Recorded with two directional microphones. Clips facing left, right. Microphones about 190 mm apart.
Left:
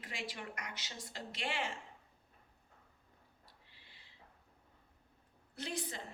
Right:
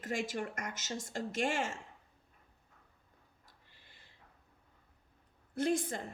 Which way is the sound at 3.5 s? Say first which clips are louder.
Right 1 dB; 45° right (ahead or behind).